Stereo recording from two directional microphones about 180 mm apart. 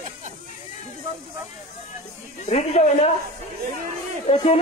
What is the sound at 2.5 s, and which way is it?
Speech, 35° left (ahead or behind).